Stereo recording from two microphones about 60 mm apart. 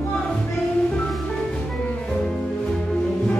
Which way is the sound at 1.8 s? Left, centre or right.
Centre.